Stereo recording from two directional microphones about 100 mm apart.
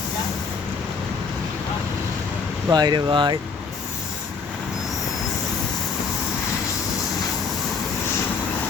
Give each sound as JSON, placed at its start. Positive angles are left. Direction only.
{"t": 2.6, "sound": "speech", "side_deg": -45}